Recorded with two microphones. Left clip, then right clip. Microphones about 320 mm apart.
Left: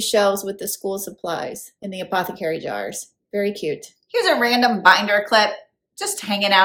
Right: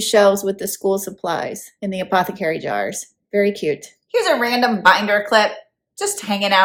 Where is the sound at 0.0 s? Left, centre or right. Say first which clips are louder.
Right 4 dB; right.